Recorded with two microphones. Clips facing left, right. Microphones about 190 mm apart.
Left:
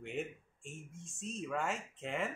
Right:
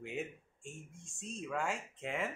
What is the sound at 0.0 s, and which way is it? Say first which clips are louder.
Speech: left 1 dB; centre (ahead or behind).